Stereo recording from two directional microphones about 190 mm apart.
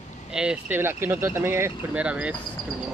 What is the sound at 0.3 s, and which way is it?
Speech, 5° right (ahead or behind).